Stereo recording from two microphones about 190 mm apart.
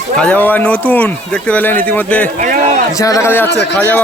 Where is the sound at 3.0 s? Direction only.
15° left (ahead or behind).